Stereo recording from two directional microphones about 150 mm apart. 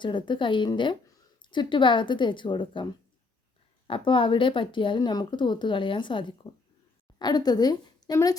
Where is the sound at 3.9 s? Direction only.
35° left (ahead or behind).